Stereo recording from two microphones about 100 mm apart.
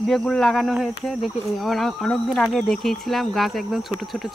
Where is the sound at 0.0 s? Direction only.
5° left (ahead or behind).